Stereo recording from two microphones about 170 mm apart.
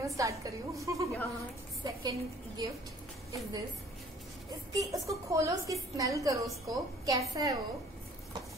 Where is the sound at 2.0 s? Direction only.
20° right (ahead or behind).